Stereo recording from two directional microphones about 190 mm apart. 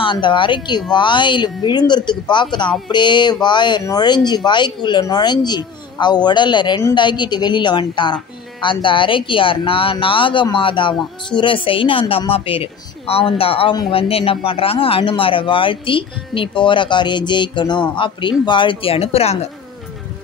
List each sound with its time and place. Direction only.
0.0 s speech: 25° left (ahead or behind)